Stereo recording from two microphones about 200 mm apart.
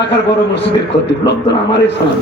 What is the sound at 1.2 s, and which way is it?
Speech, 25° left (ahead or behind).